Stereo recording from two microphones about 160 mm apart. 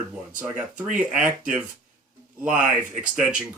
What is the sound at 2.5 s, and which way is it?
Speech, 55° right (ahead or behind).